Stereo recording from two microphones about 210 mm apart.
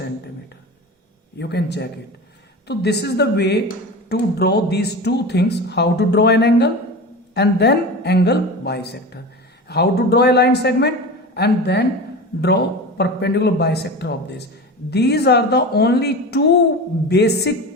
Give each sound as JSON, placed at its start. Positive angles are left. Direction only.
{"t": 1.4, "sound": "speech", "side_deg": 55}
{"t": 13.0, "sound": "speech", "side_deg": 50}